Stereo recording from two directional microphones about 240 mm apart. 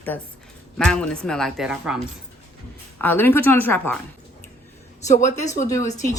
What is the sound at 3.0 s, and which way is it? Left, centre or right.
A woman's voice, centre.